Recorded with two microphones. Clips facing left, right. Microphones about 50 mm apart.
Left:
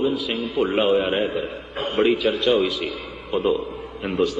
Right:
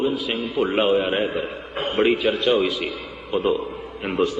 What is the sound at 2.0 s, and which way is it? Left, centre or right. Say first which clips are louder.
Speech: even; right.